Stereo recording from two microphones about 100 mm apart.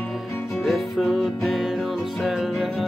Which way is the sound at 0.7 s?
Centre (ahead or behind).